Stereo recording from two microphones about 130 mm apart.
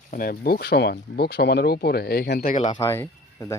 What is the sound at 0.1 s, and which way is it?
Speech, 90° left.